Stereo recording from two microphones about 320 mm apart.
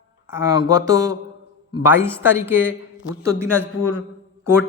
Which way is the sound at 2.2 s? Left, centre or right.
Centre.